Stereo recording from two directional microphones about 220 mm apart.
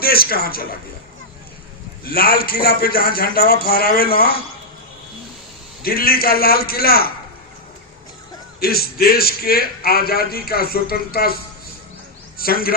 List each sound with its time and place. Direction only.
0.0 s a man's voice: 45° left (ahead or behind)
2.0 s a man's voice: 45° left (ahead or behind)
5.8 s a man's voice: 45° left (ahead or behind)
8.6 s a man's voice: 45° left (ahead or behind)
12.4 s a man's voice: 40° left (ahead or behind)